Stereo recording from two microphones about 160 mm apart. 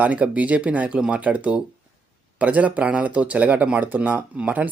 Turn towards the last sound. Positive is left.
turn(degrees=-10)  # may be behind; listen again after turning